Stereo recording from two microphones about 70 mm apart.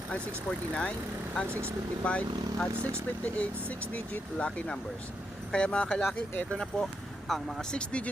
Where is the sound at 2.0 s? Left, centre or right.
Centre.